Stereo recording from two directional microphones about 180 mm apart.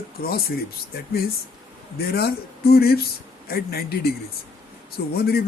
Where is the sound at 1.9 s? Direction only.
60° left (ahead or behind).